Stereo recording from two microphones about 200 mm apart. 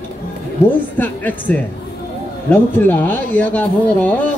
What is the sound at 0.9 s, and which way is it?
Speech, 10° left (ahead or behind).